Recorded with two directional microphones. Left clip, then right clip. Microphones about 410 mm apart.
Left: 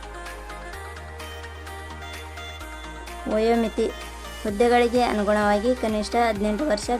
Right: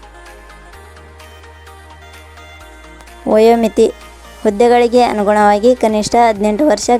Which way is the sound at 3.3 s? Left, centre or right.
Centre.